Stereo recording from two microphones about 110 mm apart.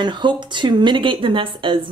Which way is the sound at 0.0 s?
45° right (ahead or behind).